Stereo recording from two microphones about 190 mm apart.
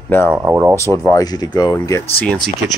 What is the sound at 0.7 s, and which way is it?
Speech, 15° left (ahead or behind).